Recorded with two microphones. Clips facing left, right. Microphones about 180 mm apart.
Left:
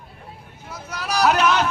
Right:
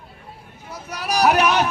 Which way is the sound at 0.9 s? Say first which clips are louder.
Right 2 dB; 15° right (ahead or behind).